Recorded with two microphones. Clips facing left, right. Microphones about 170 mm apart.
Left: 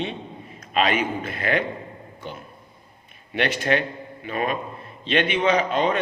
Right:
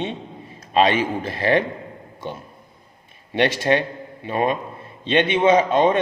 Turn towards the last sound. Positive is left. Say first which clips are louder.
# right 5 dB
turn(degrees=-25)  # may be behind; listen again after turning